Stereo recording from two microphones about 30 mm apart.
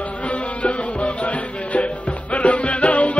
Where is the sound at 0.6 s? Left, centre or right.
Left.